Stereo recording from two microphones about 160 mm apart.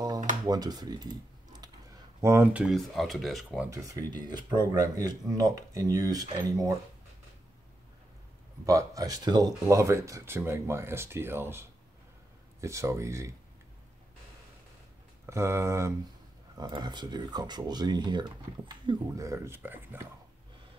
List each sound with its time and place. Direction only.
0.5 s speech: 25° right (ahead or behind)
2.2 s speech: 15° right (ahead or behind)
3.7 s speech: 20° right (ahead or behind)
8.6 s speech: 20° right (ahead or behind)
15.2 s speech: 15° right (ahead or behind)